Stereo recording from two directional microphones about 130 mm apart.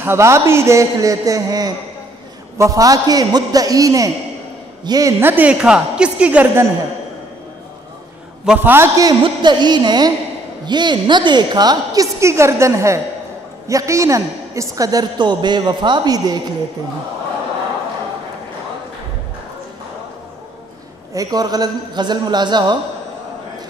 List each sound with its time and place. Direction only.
0.0 s a woman's voice: 20° right (ahead or behind)
5.2 s a woman's voice: 15° right (ahead or behind)
8.5 s a woman's voice: 15° right (ahead or behind)
9.2 s a man's voice: 35° right (ahead or behind)
21.1 s a man's voice: 30° right (ahead or behind)